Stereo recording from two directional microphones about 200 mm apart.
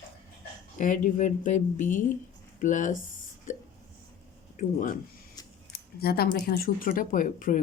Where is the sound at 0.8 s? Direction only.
40° left (ahead or behind).